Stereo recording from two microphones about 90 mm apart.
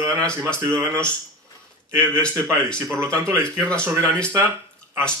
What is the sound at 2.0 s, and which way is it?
Speech, 10° left (ahead or behind).